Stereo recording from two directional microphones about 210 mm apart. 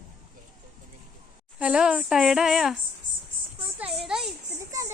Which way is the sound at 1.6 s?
5° right (ahead or behind).